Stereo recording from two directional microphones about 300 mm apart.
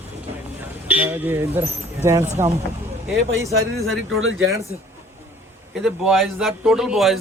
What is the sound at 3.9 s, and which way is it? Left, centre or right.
Speech, right.